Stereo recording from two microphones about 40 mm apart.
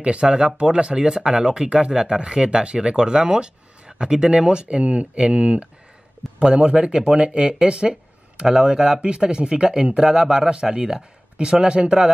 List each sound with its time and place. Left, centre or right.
0.0 s speech: right